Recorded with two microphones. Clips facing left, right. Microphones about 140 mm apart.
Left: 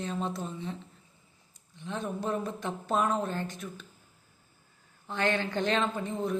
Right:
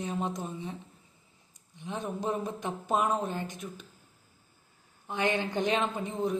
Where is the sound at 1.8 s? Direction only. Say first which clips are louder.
Even; 15° right (ahead or behind).